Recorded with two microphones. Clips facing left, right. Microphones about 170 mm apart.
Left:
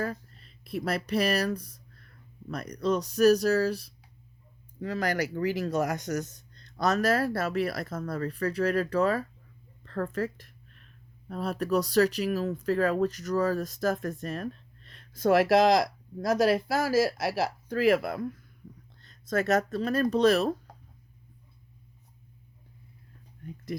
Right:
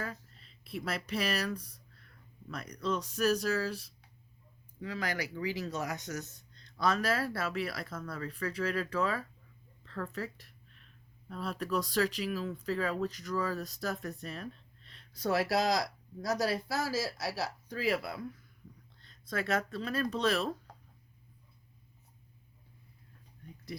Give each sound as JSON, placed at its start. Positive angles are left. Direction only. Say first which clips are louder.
{"t": 0.0, "sound": "a woman's voice", "louder": "left 8 dB", "side_deg": 45}
{"t": 15.3, "sound": "speech", "louder": "left 9 dB", "side_deg": 90}
{"t": 16.8, "sound": "speech", "louder": "left 9 dB", "side_deg": 90}
{"t": 17.8, "sound": "speech", "louder": "left 8 dB", "side_deg": 50}